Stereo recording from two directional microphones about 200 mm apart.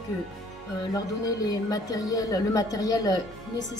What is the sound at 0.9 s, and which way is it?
Speech, 20° left (ahead or behind).